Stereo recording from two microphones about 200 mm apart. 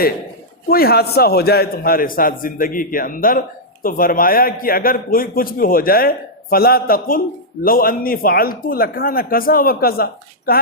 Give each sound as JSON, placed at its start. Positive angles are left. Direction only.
{"t": 0.7, "sound": "a man's voice", "side_deg": 50}